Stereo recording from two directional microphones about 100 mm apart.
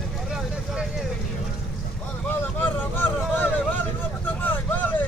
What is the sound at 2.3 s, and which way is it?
Vehicle, 20° left (ahead or behind).